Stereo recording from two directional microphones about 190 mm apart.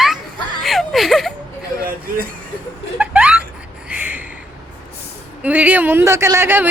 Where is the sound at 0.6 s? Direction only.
Centre (ahead or behind).